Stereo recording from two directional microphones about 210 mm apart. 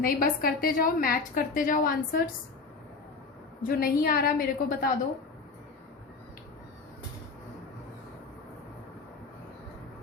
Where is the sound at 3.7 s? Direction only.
45° left (ahead or behind).